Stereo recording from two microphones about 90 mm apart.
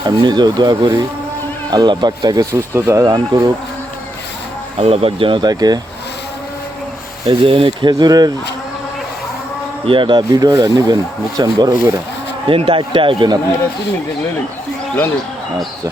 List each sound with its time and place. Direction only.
0.0 s speech: 50° right (ahead or behind)
2.7 s speech: 30° right (ahead or behind)
3.1 s speech: 50° right (ahead or behind)
4.8 s speech: 90° right
5.4 s speech: 50° right (ahead or behind)
7.3 s speech: 75° right (ahead or behind); by 8.3 s 50° right (ahead or behind)
9.8 s speech: 70° right (ahead or behind)
12.5 s speech: 85° right